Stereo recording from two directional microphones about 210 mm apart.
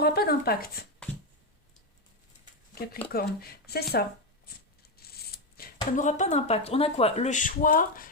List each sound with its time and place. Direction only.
0.0 s speech: 50° left (ahead or behind)
2.4 s a sound: 45° left (ahead or behind)
3.1 s speech: 45° left (ahead or behind)